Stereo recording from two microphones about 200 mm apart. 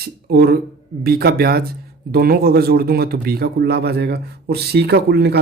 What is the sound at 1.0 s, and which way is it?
Speech, 50° right (ahead or behind).